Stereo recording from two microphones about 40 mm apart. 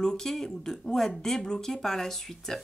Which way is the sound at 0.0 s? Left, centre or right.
Centre.